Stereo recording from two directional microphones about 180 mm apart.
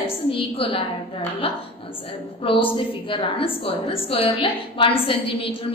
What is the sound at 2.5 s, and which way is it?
A woman's voice, 30° left (ahead or behind).